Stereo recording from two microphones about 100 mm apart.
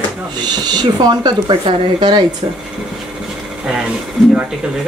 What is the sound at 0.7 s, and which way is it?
A woman's voice, 45° right (ahead or behind).